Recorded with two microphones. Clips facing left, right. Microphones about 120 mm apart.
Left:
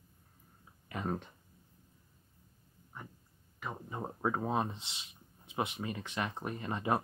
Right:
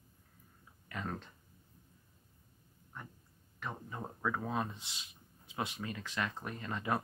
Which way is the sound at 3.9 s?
25° left (ahead or behind).